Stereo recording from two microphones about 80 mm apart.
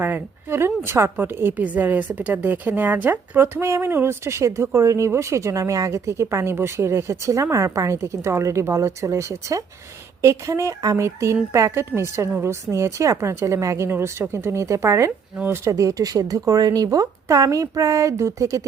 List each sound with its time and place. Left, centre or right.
0.0 s a woman's voice: right